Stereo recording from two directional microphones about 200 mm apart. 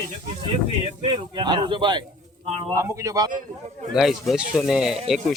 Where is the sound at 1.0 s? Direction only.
25° right (ahead or behind).